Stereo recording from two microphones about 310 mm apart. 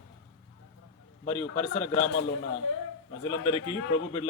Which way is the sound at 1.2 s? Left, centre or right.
Centre.